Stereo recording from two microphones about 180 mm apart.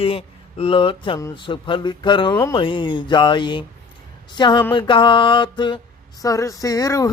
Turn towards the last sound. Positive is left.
turn(degrees=20)  # may be behind; listen again after turning